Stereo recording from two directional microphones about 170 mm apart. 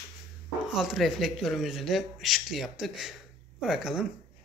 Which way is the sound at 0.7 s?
5° right (ahead or behind).